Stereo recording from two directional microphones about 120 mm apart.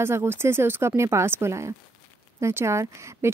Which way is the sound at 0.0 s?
20° right (ahead or behind).